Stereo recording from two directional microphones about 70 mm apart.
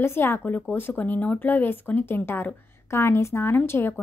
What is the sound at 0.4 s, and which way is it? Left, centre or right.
Speech, left.